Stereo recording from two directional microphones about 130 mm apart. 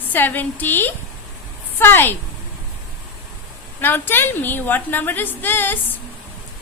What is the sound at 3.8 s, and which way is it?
A woman's voice, 15° left (ahead or behind).